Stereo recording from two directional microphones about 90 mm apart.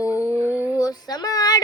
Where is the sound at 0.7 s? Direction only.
45° left (ahead or behind).